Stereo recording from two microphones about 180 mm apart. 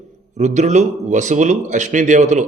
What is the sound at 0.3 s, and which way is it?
Speech, 40° right (ahead or behind).